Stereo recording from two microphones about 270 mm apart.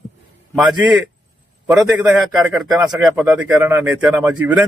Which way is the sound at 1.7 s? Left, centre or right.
Centre.